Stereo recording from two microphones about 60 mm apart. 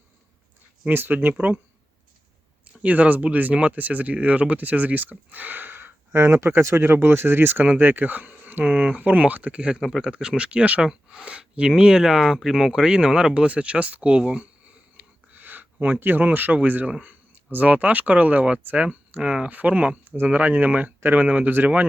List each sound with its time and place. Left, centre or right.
0.9 s speech: right
2.8 s speech: right
14.9 s a sound: right
17.0 s speech: right